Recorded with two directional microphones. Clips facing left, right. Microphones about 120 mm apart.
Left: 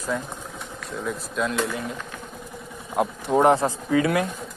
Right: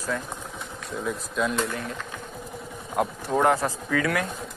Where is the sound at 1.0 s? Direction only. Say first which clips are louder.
Even; centre (ahead or behind).